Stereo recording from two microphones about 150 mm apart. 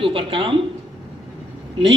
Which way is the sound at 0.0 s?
35° right (ahead or behind).